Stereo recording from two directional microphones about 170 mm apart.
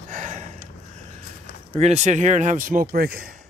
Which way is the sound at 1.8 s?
40° right (ahead or behind).